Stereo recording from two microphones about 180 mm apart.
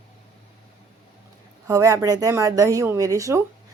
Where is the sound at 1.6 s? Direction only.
15° right (ahead or behind).